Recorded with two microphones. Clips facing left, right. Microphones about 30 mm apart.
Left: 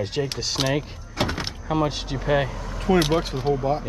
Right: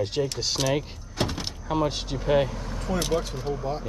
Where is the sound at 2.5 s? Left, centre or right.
Left.